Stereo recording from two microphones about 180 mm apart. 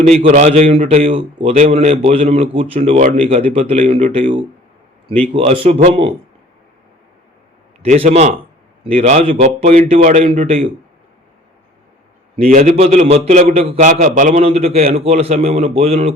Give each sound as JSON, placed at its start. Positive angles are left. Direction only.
{"t": 0.1, "sound": "speech", "side_deg": -35}
{"t": 7.9, "sound": "speech", "side_deg": -35}
{"t": 12.4, "sound": "speech", "side_deg": -45}